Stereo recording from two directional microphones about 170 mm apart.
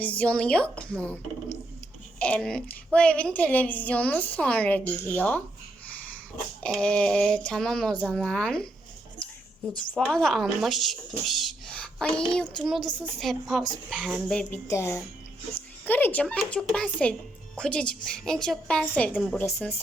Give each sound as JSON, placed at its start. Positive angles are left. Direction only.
{"t": 0.0, "sound": "a woman's voice", "side_deg": 10}
{"t": 6.6, "sound": "speech", "side_deg": 5}
{"t": 9.9, "sound": "speech", "side_deg": 5}
{"t": 14.7, "sound": "a woman's voice", "side_deg": 15}